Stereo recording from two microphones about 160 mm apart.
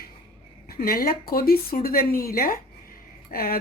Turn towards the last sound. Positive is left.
turn(degrees=65)  # may be behind; listen again after turning